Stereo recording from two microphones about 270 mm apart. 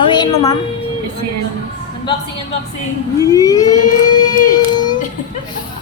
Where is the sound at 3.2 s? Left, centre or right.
Centre.